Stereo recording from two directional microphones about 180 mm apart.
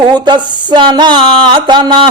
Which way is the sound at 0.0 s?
25° right (ahead or behind).